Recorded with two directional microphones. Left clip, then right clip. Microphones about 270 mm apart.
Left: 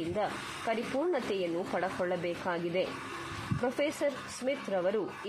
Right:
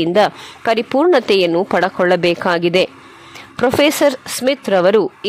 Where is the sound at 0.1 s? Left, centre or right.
Right.